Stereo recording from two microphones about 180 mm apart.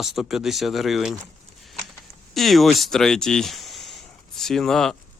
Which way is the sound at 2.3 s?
Centre (ahead or behind).